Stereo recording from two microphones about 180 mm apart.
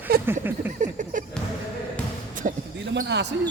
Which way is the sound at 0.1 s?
55° right (ahead or behind).